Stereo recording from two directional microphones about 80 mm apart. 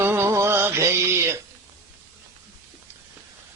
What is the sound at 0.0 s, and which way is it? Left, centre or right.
Music, right.